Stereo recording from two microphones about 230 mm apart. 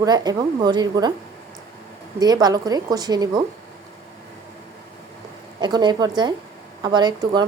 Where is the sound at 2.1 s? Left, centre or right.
Centre.